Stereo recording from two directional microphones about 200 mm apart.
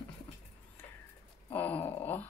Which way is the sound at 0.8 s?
10° left (ahead or behind).